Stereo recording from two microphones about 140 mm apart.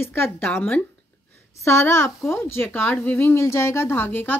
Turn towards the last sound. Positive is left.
turn(degrees=15)  # may be behind; listen again after turning